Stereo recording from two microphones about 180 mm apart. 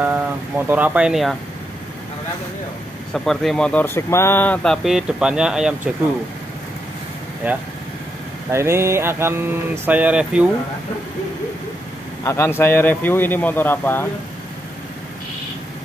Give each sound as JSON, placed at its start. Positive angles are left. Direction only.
{"t": 0.0, "sound": "speech", "side_deg": -10}
{"t": 3.1, "sound": "speech", "side_deg": 0}
{"t": 4.8, "sound": "speech", "side_deg": -5}
{"t": 7.4, "sound": "mantra", "side_deg": -10}
{"t": 12.3, "sound": "speech", "side_deg": 15}